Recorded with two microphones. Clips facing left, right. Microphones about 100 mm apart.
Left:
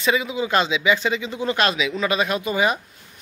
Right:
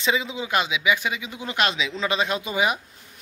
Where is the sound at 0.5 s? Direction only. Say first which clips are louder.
Left 3 dB; 10° right (ahead or behind).